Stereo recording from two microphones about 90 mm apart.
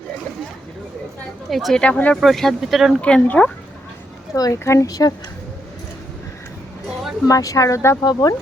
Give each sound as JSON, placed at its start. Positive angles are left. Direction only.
{"t": 1.5, "sound": "speech", "side_deg": 0}
{"t": 1.8, "sound": "speech", "side_deg": 15}
{"t": 2.2, "sound": "speech", "side_deg": 5}
{"t": 3.0, "sound": "speech", "side_deg": 15}
{"t": 4.6, "sound": "speech", "side_deg": 35}
{"t": 7.3, "sound": "speech", "side_deg": 40}
{"t": 8.0, "sound": "speech", "side_deg": 45}